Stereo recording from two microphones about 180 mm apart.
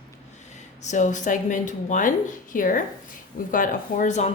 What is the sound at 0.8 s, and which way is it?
Speech, 40° left (ahead or behind).